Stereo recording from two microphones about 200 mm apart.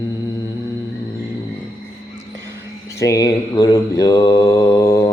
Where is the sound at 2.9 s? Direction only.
15° left (ahead or behind).